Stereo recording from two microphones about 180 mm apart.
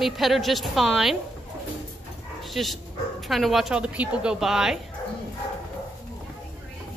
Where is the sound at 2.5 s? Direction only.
Centre (ahead or behind).